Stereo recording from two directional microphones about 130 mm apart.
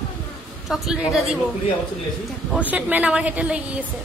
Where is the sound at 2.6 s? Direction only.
10° right (ahead or behind).